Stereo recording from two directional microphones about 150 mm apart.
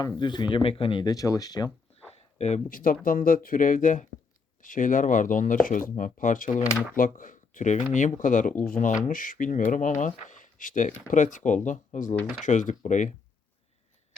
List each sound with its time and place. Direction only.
0.2 s speech: 30° left (ahead or behind)
2.6 s speech: 70° left (ahead or behind)
6.6 s speech: 20° left (ahead or behind)
6.9 s speech: 65° left (ahead or behind)